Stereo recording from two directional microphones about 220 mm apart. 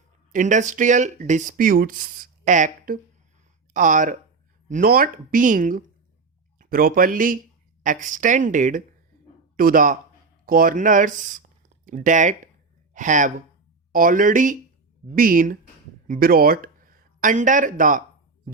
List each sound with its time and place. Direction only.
0.3 s speech: 35° right (ahead or behind)